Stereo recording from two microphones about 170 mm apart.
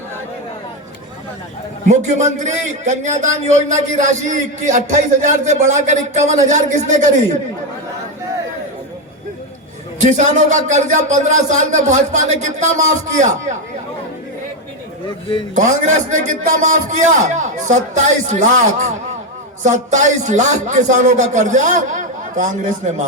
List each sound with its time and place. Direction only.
1.9 s speech: 45° right (ahead or behind)
10.0 s speech: 45° right (ahead or behind)
15.5 s speech: 45° right (ahead or behind)